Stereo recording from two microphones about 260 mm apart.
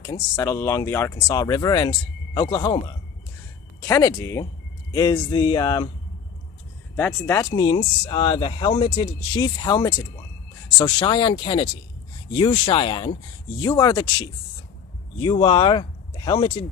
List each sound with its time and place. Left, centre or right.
0.0 s speech: centre
6.9 s speech: centre